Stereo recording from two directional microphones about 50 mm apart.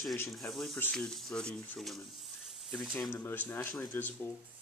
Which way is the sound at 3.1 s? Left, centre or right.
Left.